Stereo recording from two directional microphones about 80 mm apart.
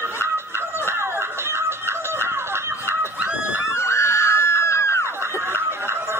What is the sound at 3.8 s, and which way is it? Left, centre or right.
Screaming, left.